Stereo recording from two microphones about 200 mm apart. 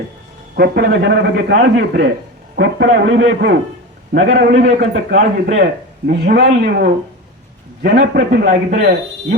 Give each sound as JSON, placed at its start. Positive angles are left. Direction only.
{"t": 0.5, "sound": "a man's voice", "side_deg": -55}